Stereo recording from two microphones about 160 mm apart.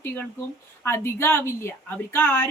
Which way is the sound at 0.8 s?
15° left (ahead or behind).